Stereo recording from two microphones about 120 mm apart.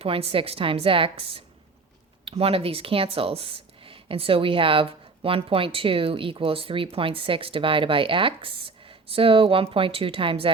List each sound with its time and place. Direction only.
0.0 s speech: 55° right (ahead or behind)